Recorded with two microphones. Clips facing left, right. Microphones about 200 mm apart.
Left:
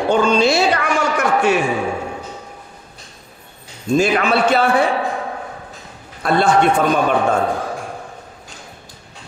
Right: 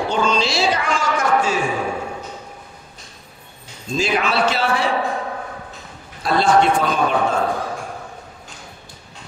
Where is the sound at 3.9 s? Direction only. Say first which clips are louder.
Left 5 dB; 55° left (ahead or behind).